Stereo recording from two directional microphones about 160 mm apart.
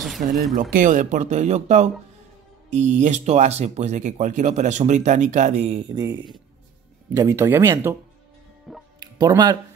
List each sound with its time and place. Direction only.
0.6 s speech: 60° right (ahead or behind); by 5.9 s 40° right (ahead or behind)
5.9 s speech: 25° right (ahead or behind)
8.7 s music: centre (ahead or behind)
9.0 s speech: 25° right (ahead or behind)